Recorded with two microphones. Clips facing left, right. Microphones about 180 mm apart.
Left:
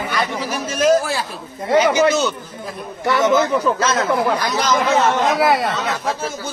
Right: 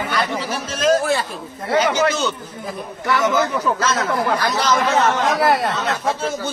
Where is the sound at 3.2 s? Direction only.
20° left (ahead or behind).